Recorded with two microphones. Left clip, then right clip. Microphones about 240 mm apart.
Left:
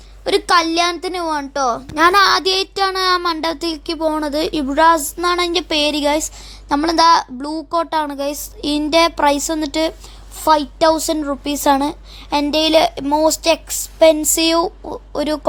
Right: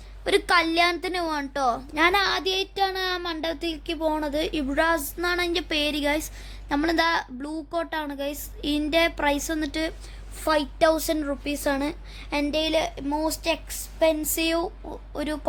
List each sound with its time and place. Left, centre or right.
0.3 s a child's voice: centre